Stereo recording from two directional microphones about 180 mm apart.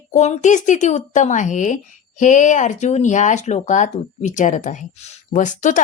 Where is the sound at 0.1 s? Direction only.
40° left (ahead or behind).